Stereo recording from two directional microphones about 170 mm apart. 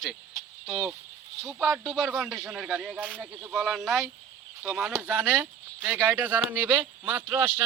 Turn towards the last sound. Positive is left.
turn(degrees=-15)  # may be behind; listen again after turning